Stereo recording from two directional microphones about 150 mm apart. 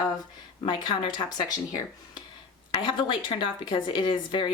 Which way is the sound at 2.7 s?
35° left (ahead or behind).